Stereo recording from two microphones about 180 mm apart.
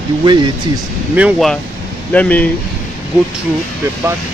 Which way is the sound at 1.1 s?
5° right (ahead or behind).